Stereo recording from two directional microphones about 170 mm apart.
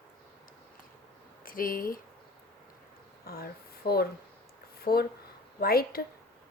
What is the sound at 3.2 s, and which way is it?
A woman's voice, 65° left (ahead or behind).